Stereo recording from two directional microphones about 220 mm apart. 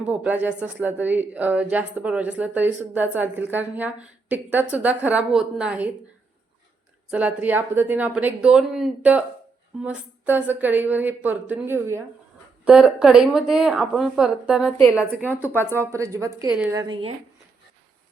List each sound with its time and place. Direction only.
0.0 s a woman's voice: 5° right (ahead or behind)
7.1 s a woman's voice: 5° right (ahead or behind)